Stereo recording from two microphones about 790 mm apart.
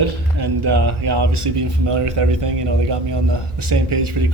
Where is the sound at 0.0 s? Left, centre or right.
Right.